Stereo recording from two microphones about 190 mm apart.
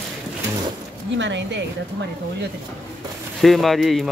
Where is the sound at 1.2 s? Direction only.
70° right (ahead or behind).